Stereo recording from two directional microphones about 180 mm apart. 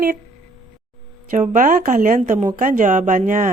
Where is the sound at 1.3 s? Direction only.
50° right (ahead or behind).